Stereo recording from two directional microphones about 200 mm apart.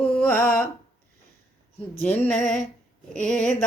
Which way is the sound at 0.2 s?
10° left (ahead or behind).